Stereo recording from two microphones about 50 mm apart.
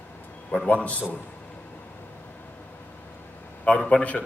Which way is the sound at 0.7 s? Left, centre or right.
Left.